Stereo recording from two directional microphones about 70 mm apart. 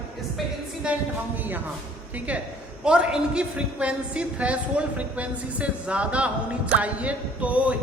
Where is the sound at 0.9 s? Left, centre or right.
Centre.